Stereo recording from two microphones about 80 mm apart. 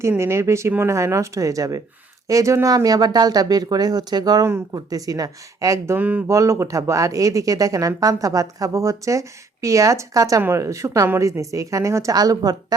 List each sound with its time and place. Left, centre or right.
0.2 s speech: right
6.0 s speech: right
6.2 s speech: right
12.1 s speech: right